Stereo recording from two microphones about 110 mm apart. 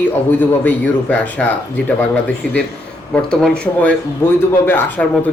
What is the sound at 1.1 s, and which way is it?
Speech, 15° left (ahead or behind).